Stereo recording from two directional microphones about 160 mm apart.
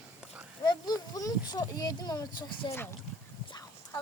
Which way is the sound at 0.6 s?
25° left (ahead or behind).